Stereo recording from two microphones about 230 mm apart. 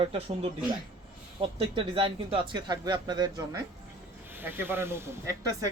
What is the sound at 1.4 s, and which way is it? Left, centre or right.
Speech, right.